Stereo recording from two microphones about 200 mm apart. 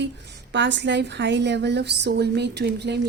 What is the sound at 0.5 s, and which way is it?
A woman's voice, 60° right (ahead or behind).